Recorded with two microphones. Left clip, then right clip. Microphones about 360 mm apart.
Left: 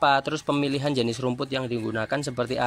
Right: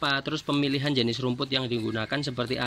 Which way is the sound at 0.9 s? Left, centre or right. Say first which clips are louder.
Left 1 dB; left.